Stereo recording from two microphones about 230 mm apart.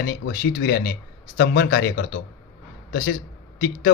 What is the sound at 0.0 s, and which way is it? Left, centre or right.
A man's voice, left.